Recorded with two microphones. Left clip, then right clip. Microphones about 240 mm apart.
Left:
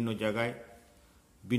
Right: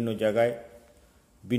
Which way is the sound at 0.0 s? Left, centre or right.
Centre.